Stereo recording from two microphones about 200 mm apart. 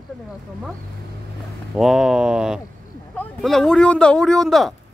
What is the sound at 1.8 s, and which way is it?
Speech, centre (ahead or behind).